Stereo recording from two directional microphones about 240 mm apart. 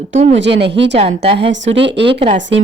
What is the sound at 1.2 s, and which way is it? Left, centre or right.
Speech, right.